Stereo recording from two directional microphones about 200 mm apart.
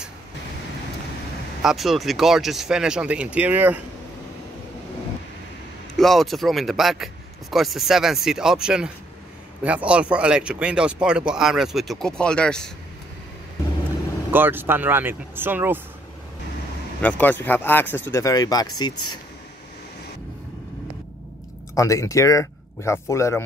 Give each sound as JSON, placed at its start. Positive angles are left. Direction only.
{"t": 1.6, "sound": "speech", "side_deg": 0}
{"t": 5.9, "sound": "speech", "side_deg": 0}
{"t": 14.3, "sound": "speech", "side_deg": -10}
{"t": 17.0, "sound": "speech", "side_deg": 10}
{"t": 21.7, "sound": "speech", "side_deg": 15}